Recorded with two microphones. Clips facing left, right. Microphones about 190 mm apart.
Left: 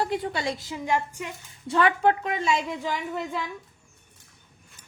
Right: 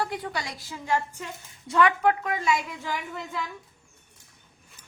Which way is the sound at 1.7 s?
30° left (ahead or behind).